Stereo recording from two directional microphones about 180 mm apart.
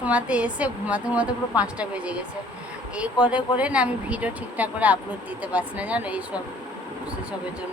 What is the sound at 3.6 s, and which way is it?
Speech, 5° right (ahead or behind).